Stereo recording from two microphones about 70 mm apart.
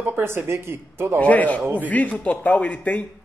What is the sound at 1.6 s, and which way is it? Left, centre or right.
Speech, right.